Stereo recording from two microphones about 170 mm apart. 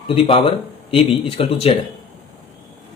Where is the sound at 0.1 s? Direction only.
35° left (ahead or behind).